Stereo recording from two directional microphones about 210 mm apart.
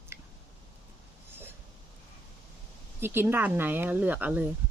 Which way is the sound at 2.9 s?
10° right (ahead or behind).